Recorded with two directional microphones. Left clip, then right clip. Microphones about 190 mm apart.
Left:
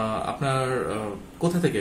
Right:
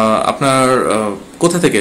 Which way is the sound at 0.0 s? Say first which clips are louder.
Right 14 dB; 45° right (ahead or behind).